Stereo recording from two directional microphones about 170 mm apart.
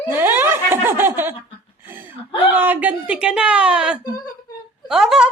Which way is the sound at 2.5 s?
10° right (ahead or behind).